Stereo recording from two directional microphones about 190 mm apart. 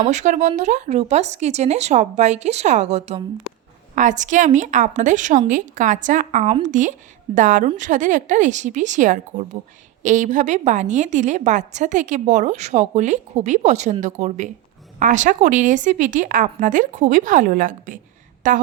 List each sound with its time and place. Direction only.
0.0 s a woman's voice: 40° right (ahead or behind)